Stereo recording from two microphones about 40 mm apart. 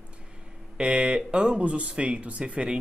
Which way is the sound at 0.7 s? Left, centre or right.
Right.